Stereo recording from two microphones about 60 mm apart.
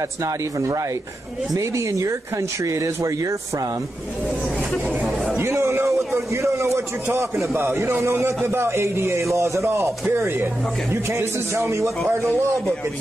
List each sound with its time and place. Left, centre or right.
0.2 s speech: right
5.0 s speech: centre
5.4 s a man's voice: right
10.1 s a man's voice: right